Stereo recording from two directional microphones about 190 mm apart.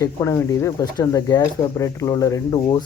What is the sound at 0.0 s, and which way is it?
Speech, 15° left (ahead or behind).